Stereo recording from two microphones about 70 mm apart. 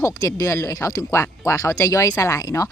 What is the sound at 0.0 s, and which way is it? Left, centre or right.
Speech, left.